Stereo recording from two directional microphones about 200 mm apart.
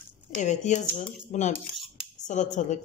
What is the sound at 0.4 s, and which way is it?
A woman's voice, 35° left (ahead or behind).